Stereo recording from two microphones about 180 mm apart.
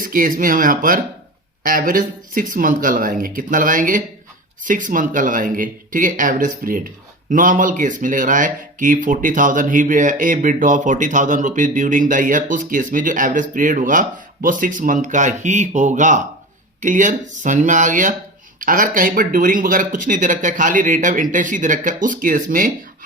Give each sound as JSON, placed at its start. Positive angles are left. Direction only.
{"t": 0.0, "sound": "speech", "side_deg": -50}